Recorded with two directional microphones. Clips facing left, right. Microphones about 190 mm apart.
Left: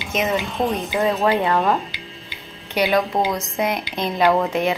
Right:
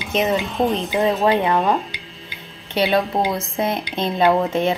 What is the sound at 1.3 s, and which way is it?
Speech, 15° right (ahead or behind).